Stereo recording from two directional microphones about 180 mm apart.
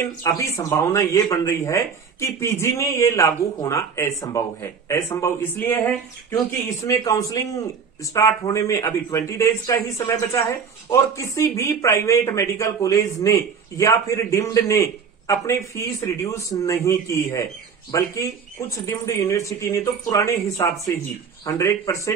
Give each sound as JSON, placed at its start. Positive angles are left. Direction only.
{"t": 0.2, "sound": "speech", "side_deg": 20}